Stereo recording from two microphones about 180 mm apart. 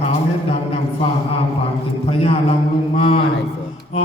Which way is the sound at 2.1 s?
35° left (ahead or behind).